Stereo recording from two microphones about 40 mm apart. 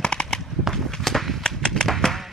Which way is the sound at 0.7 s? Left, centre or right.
Centre.